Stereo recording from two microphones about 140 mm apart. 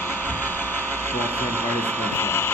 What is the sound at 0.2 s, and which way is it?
Music, 10° left (ahead or behind).